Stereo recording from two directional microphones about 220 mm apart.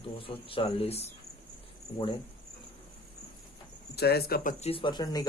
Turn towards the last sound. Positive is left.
turn(degrees=20)  # may be behind; listen again after turning